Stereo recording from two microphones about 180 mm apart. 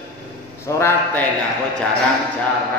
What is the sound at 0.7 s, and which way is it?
Speech, 15° left (ahead or behind).